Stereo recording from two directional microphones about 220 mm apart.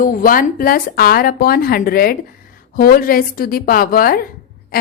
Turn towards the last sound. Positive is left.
turn(degrees=40)  # may be behind; listen again after turning